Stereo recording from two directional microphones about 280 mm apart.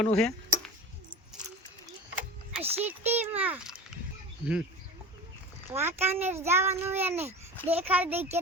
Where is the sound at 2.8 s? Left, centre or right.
Centre.